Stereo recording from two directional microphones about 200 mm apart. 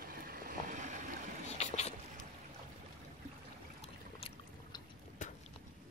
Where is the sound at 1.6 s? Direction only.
35° left (ahead or behind).